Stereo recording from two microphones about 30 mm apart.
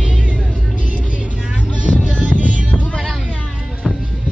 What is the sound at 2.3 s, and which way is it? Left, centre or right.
Music, right.